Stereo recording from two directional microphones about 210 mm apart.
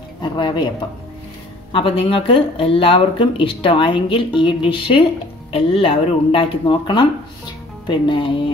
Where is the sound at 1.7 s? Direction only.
25° left (ahead or behind).